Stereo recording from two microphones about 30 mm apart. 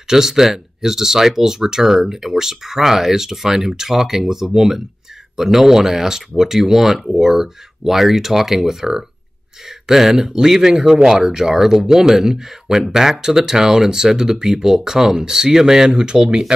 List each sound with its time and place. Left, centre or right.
0.1 s speech: centre
7.1 s speech: centre